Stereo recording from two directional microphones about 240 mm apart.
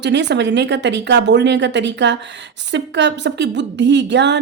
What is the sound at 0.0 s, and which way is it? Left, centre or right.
Speech, right.